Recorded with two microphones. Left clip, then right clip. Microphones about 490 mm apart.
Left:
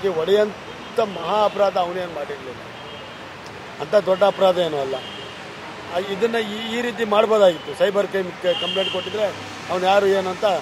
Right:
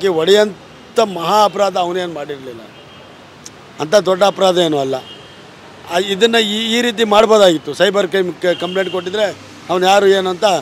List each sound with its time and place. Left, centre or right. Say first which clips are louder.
0.0 s a man's voice: right 7 dB; right
3.8 s a man's voice: right 5 dB; right
5.9 s a man's voice: right 9 dB; right